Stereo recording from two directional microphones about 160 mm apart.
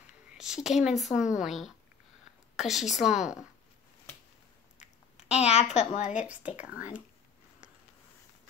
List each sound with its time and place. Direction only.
0.4 s speech: 5° right (ahead or behind)
4.7 s speech: 40° left (ahead or behind)
6.2 s speech: 10° right (ahead or behind)